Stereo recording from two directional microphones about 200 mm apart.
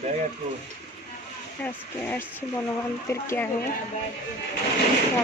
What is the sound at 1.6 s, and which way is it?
Speech, 10° left (ahead or behind).